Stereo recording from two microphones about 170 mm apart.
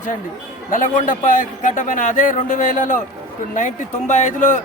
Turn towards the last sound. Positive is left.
turn(degrees=50)  # may be behind; listen again after turning